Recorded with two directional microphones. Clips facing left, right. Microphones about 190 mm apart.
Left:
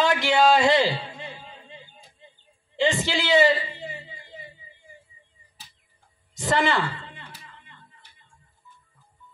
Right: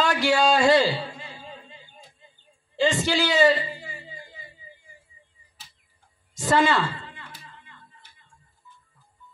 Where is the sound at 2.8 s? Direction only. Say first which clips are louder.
Right 2 dB; 20° left (ahead or behind).